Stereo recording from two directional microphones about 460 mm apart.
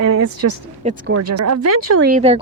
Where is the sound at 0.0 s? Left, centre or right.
Right.